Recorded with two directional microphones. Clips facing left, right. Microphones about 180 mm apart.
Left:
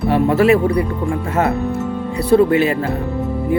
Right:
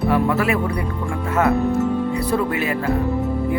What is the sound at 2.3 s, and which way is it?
Speech, 30° left (ahead or behind).